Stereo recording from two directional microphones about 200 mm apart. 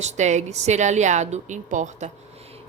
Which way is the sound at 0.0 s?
35° right (ahead or behind).